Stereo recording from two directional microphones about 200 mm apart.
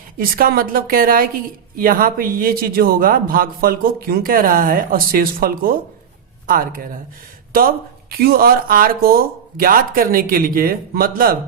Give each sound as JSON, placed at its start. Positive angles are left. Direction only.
{"t": 0.2, "sound": "a man's voice", "side_deg": -50}